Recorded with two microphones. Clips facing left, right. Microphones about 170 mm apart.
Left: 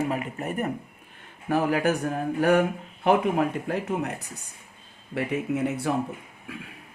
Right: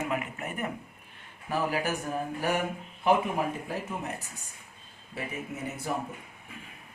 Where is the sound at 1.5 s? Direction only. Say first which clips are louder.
Left 6 dB; 55° left (ahead or behind).